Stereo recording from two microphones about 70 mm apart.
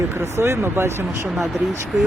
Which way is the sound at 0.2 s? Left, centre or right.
Right.